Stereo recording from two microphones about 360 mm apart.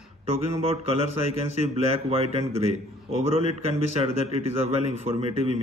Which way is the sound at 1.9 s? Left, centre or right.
Centre.